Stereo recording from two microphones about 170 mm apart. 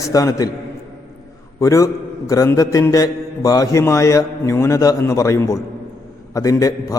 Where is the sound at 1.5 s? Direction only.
20° left (ahead or behind).